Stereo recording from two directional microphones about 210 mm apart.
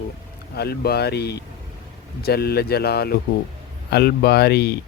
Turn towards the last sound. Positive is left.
turn(degrees=50)  # may be behind; listen again after turning